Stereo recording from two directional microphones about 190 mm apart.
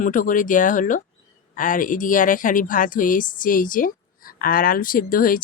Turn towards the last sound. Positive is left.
turn(degrees=45)  # may be behind; listen again after turning